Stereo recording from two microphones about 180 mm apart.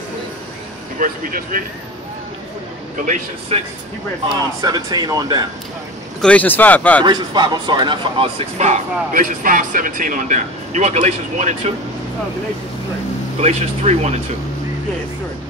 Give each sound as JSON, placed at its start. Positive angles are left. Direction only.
{"t": 0.9, "sound": "speech", "side_deg": -50}
{"t": 4.6, "sound": "speech", "side_deg": -20}
{"t": 6.2, "sound": "speech", "side_deg": 10}
{"t": 7.0, "sound": "speech", "side_deg": -25}
{"t": 13.4, "sound": "speech", "side_deg": -40}